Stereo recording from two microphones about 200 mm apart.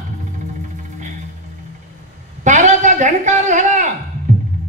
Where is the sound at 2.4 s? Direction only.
40° right (ahead or behind).